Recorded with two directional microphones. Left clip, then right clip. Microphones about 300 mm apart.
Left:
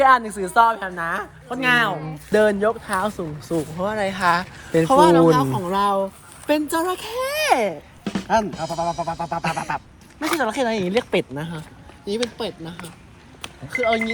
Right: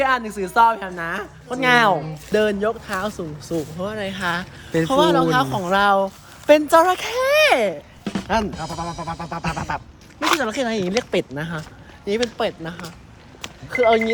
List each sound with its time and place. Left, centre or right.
0.0 s a woman's voice: centre
2.3 s a woman's voice: centre
6.5 s speech: right
6.9 s a woman's voice: centre
7.5 s speech: centre
8.0 s a woman's voice: centre
10.4 s speech: centre
11.3 s a woman's voice: centre
13.7 s speech: right